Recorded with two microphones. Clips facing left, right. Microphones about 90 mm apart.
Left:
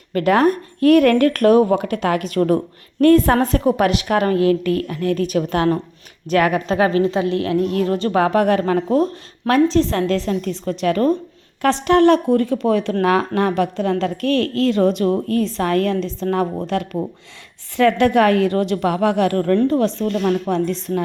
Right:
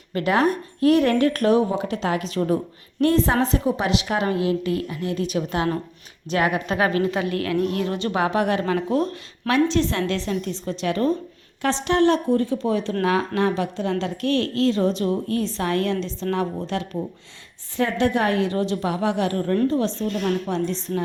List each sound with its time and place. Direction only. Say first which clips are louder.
0.1 s speech: left 5 dB; 45° left (ahead or behind)
6.7 s a woman's voice: left 5 dB; 30° left (ahead or behind)
7.7 s a woman's voice: left 6 dB; 40° left (ahead or behind); by 21.0 s 55° left (ahead or behind)